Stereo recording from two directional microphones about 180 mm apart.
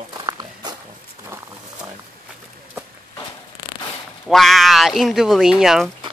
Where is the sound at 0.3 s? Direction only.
20° right (ahead or behind).